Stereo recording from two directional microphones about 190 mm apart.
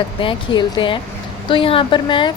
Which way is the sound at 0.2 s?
25° left (ahead or behind).